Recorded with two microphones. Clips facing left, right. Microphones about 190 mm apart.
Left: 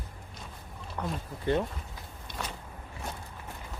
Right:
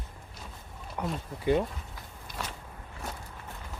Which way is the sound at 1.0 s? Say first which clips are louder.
Right 1 dB; 10° right (ahead or behind).